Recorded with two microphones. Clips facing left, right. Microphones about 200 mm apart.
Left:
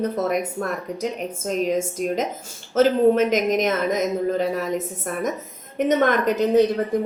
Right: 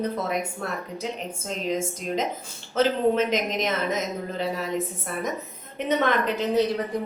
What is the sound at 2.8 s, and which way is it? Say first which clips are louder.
Speech: left 5 dB; 50° left (ahead or behind).